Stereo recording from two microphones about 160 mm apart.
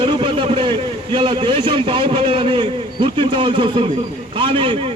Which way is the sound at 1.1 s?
30° right (ahead or behind).